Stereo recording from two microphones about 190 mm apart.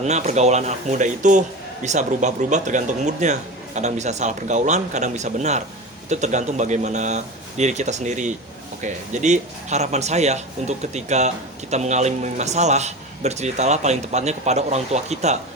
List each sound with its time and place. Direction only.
0.0 s a man's voice: 35° right (ahead or behind)